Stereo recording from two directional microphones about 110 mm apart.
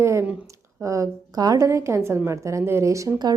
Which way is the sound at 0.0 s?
25° right (ahead or behind).